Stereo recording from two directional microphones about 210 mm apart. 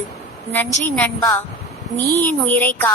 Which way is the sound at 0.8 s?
10° left (ahead or behind).